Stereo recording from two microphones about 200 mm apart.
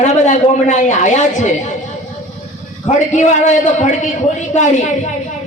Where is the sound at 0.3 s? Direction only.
35° left (ahead or behind).